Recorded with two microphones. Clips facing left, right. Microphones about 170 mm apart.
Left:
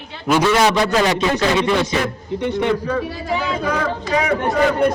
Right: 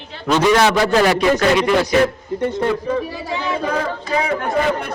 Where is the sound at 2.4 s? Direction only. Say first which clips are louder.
Right 1 dB; 75° left (ahead or behind).